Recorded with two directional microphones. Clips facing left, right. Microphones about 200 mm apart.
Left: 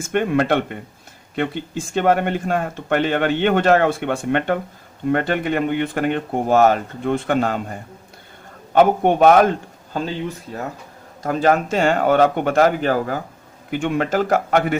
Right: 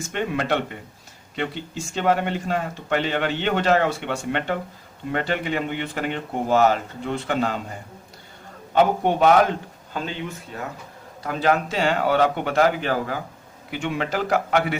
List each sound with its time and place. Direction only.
0.1 s speech: 55° left (ahead or behind)